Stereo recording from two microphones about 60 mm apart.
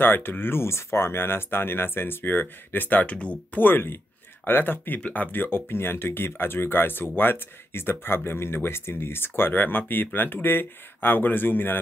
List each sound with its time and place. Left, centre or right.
0.0 s speech: left
3.6 s speech: left